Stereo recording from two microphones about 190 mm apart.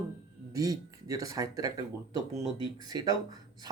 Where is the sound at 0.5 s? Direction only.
20° right (ahead or behind).